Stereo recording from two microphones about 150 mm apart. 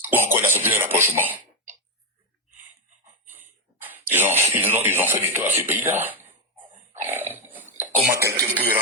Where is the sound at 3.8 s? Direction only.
15° right (ahead or behind).